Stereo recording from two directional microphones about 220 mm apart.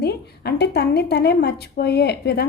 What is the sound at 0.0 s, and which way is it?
A woman's voice, 50° left (ahead or behind).